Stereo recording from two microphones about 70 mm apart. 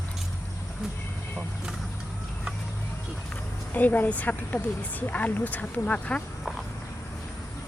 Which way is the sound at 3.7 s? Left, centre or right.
Left.